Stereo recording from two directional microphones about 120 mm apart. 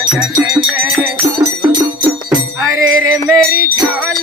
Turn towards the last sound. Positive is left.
turn(degrees=0)  # may be behind; listen again after turning